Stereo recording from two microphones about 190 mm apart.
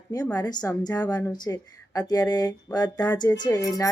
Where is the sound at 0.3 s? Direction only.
20° left (ahead or behind).